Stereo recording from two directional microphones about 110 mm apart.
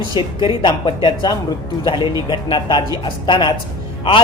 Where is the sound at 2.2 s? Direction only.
40° left (ahead or behind).